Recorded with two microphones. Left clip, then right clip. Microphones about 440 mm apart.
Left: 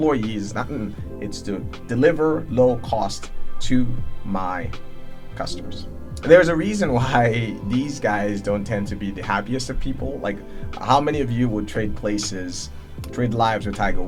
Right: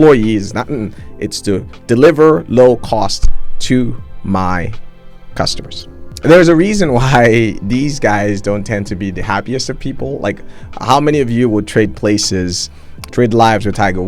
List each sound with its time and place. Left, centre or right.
0.3 s speech: right
1.2 s speech: right
6.4 s speech: right